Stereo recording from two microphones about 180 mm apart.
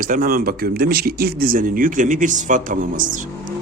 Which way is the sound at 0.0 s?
50° right (ahead or behind).